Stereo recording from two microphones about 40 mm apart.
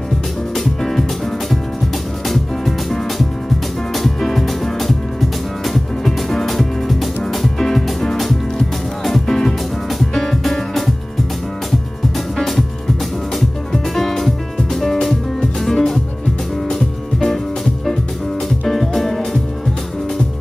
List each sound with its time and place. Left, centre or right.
0.6 s music: centre
2.2 s music: centre
12.4 s music: centre
13.9 s music: centre
18.7 s music: centre